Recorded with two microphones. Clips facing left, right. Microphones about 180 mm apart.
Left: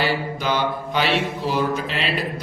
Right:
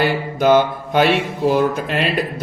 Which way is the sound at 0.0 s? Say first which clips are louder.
Right 6 dB; 50° right (ahead or behind).